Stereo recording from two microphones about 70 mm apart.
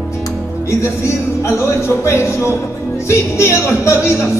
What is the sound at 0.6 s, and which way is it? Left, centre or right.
Speech, left.